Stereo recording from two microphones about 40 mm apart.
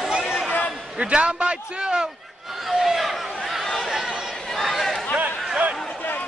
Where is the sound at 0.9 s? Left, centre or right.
Right.